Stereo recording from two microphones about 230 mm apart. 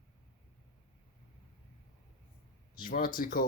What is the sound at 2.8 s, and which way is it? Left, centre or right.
Speech, left.